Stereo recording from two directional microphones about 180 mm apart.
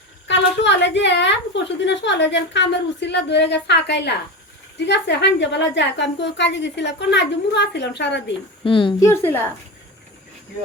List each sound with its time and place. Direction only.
0.3 s a woman's voice: 80° left
8.6 s a woman's voice: 30° left (ahead or behind)